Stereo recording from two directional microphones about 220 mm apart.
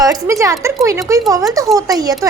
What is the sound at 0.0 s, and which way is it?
A child's voice, 15° right (ahead or behind).